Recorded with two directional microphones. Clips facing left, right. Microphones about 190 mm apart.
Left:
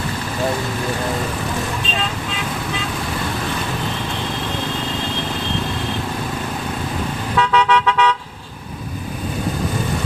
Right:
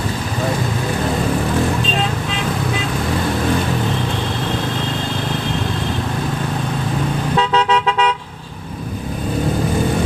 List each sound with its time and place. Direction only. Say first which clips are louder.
7.3 s vehicle: left 1 dB; 25° right (ahead or behind)